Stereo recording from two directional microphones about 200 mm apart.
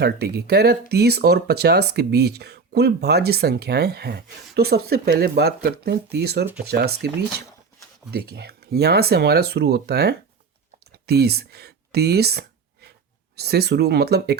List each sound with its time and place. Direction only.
0.0 s speech: 55° right (ahead or behind)
8.1 s speech: 55° right (ahead or behind)
11.0 s a sound: 55° right (ahead or behind)
13.3 s speech: 55° right (ahead or behind)